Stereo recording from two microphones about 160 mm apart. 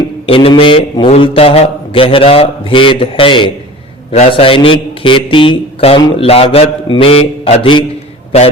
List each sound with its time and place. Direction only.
0.0 s speech: 35° left (ahead or behind)